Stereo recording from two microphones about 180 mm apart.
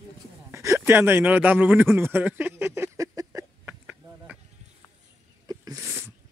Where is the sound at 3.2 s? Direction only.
15° right (ahead or behind).